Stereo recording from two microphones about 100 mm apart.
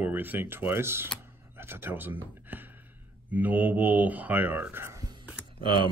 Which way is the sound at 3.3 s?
15° right (ahead or behind).